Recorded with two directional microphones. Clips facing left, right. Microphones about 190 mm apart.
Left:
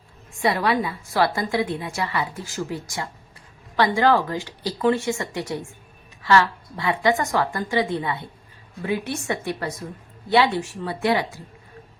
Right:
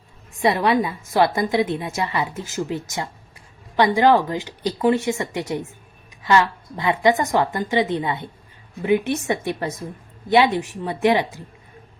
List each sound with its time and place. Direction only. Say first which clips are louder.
0.3 s a woman's voice: right 3 dB; 20° right (ahead or behind)